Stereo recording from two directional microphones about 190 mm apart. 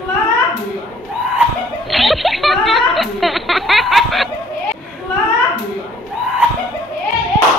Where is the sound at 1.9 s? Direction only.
Centre (ahead or behind).